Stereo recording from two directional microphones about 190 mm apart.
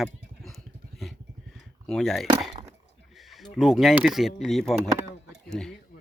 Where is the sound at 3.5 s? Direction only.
Centre (ahead or behind).